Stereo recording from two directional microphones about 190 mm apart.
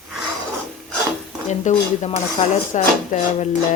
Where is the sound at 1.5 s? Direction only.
35° left (ahead or behind).